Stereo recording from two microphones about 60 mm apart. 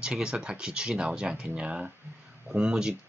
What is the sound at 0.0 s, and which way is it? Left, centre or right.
Speech, centre.